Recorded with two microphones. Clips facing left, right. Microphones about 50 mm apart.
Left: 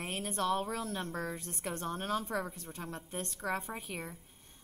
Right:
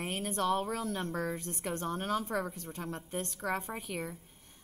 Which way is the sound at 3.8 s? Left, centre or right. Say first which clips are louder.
Right 3 dB; left.